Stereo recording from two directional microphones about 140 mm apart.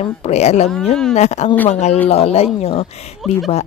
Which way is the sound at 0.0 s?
50° left (ahead or behind).